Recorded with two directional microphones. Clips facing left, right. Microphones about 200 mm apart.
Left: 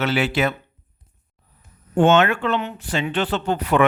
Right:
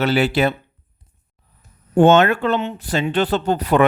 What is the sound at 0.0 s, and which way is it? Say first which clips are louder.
Speech: right 4 dB; 35° right (ahead or behind).